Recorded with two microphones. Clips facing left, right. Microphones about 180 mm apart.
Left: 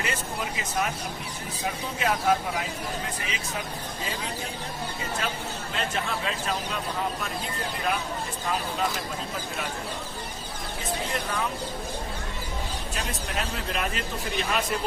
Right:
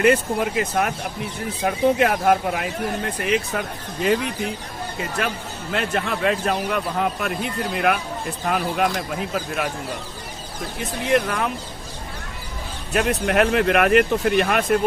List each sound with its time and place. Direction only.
0.0 s a man's voice: 60° right (ahead or behind)
5.7 s a man's voice: 65° right (ahead or behind)
10.8 s a man's voice: 65° right (ahead or behind)
12.9 s speech: 65° right (ahead or behind)